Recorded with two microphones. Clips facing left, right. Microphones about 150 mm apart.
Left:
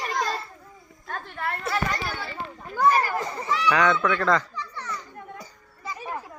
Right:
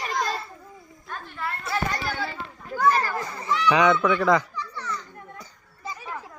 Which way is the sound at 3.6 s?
15° right (ahead or behind).